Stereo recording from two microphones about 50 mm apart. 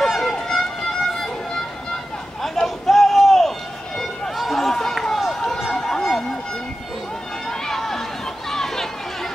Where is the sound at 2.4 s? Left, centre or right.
Centre.